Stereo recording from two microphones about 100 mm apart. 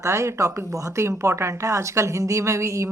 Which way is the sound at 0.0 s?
30° right (ahead or behind).